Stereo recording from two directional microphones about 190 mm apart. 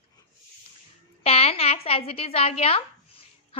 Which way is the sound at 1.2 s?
30° left (ahead or behind).